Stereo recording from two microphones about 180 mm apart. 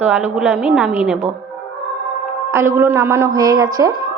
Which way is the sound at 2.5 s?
15° right (ahead or behind).